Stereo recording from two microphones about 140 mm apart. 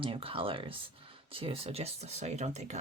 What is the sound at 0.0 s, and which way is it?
Speech, 40° right (ahead or behind).